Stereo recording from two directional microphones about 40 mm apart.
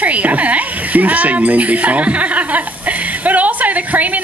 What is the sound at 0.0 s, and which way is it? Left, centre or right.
Speech, right.